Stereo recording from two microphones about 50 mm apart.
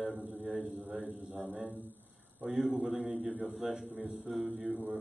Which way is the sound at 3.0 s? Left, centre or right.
Centre.